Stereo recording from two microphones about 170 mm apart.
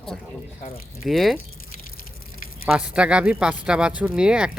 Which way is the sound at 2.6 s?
5° right (ahead or behind).